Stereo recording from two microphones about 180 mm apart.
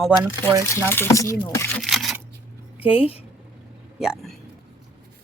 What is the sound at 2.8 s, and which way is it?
Speech, 5° right (ahead or behind).